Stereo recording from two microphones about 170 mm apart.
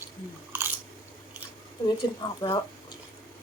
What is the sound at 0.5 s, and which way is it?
Chewing, 10° right (ahead or behind).